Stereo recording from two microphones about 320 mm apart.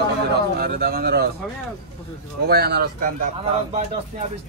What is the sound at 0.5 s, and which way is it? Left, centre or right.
Speech, right.